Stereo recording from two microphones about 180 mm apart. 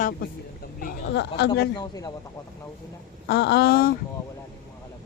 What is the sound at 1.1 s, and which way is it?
Speech, 75° left (ahead or behind).